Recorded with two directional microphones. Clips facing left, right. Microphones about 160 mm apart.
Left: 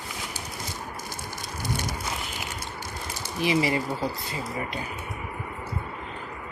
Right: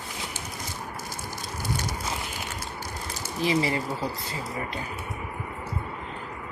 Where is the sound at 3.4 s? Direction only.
15° left (ahead or behind).